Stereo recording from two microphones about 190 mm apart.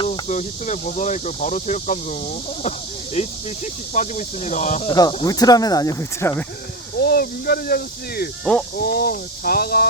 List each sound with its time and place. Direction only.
0.1 s speech: 40° left (ahead or behind)
4.9 s speech: 20° left (ahead or behind)
7.0 s speech: 55° left (ahead or behind)